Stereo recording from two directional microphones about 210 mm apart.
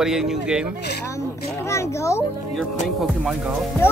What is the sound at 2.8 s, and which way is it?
Speech, centre (ahead or behind).